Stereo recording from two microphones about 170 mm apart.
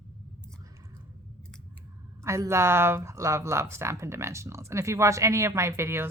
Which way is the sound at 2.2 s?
15° right (ahead or behind).